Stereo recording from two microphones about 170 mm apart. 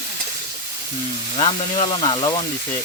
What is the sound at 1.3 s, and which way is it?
Speech, 30° left (ahead or behind).